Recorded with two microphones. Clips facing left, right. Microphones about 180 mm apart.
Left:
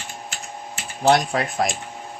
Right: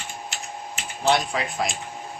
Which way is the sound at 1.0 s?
50° left (ahead or behind).